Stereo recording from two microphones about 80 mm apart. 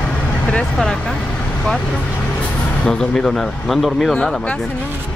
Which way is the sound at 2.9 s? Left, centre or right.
Centre.